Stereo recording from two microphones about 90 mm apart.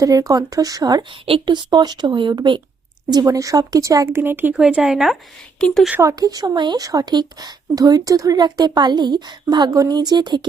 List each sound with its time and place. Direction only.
0.0 s speech: 40° right (ahead or behind)
1.2 s speech: 75° right (ahead or behind)
3.1 s speech: 45° right (ahead or behind); by 4.5 s 25° right (ahead or behind)
4.5 s speech: 10° right (ahead or behind)
5.5 s speech: 10° left (ahead or behind)
6.0 s speech: 40° right (ahead or behind)
9.7 s speech: 45° right (ahead or behind)